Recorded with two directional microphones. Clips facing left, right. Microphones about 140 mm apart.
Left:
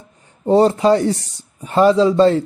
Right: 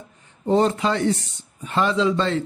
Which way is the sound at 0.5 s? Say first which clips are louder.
Left 7 dB; 35° left (ahead or behind).